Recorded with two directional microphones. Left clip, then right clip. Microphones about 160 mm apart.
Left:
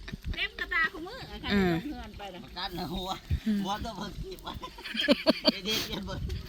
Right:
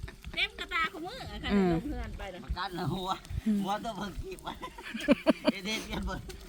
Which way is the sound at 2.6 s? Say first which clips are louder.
Even; 25° left (ahead or behind).